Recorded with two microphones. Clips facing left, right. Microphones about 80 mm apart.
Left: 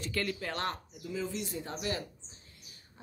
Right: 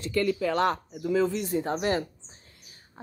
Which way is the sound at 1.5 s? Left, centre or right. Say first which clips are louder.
Right 10 dB; right.